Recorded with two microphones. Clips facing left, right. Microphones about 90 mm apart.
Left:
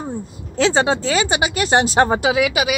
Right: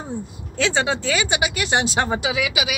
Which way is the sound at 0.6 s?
35° left (ahead or behind).